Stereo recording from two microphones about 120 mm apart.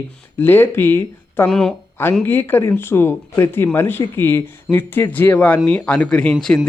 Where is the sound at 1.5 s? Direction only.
5° left (ahead or behind).